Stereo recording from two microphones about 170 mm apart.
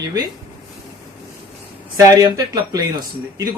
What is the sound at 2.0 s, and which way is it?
Speech, 20° right (ahead or behind).